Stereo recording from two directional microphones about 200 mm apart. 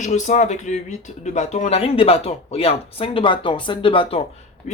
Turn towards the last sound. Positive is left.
turn(degrees=30)  # may be behind; listen again after turning